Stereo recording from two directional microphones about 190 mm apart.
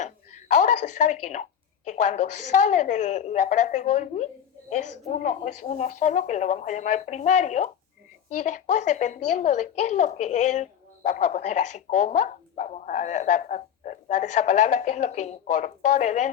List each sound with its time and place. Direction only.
0.0 s a woman's voice: 35° left (ahead or behind)